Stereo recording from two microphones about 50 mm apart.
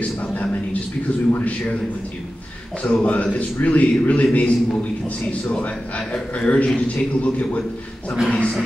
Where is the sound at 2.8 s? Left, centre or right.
Left.